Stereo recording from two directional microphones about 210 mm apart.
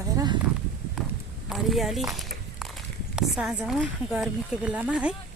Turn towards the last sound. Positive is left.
turn(degrees=-5)  # may be behind; listen again after turning